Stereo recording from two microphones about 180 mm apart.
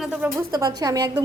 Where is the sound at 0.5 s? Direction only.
20° right (ahead or behind).